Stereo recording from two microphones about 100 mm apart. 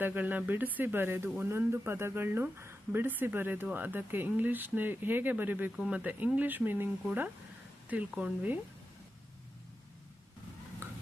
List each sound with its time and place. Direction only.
0.0 s speech: 20° right (ahead or behind)
10.8 s stir: 20° right (ahead or behind)